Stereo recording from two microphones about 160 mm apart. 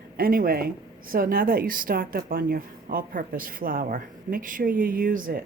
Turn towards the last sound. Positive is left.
turn(degrees=-60)  # may be behind; listen again after turning